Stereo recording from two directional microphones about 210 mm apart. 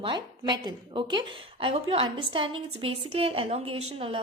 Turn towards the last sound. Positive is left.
turn(degrees=-25)  # may be behind; listen again after turning